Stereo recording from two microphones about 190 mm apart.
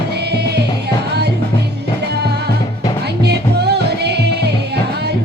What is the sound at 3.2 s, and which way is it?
Music, 60° right (ahead or behind).